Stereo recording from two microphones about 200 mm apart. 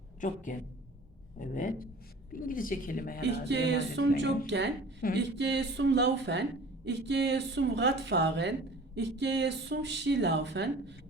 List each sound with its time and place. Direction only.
0.5 s a woman's voice: 40° left (ahead or behind)
3.2 s speech: 60° right (ahead or behind)